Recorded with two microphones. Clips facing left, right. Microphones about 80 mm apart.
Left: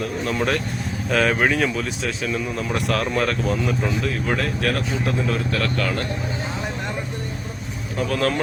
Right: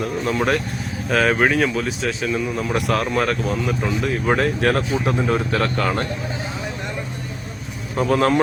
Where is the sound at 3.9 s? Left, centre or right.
Right.